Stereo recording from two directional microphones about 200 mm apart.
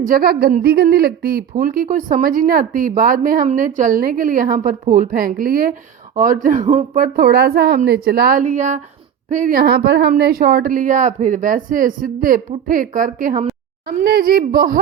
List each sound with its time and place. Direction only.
0.0 s a woman's voice: 45° right (ahead or behind)